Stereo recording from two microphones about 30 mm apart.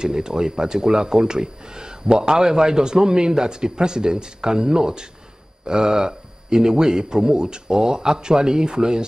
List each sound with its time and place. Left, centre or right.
0.0 s speech: right